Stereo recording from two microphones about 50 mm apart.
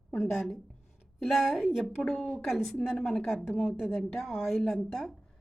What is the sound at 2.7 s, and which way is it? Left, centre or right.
Speech, left.